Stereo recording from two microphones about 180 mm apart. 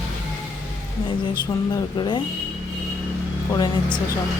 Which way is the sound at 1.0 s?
25° left (ahead or behind).